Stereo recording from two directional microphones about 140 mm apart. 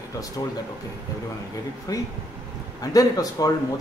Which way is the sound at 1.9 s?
25° left (ahead or behind).